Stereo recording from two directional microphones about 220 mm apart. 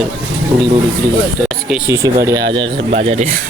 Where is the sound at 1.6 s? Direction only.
5° right (ahead or behind).